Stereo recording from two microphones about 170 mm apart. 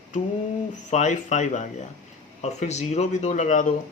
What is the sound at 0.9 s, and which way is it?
Speech, 45° left (ahead or behind).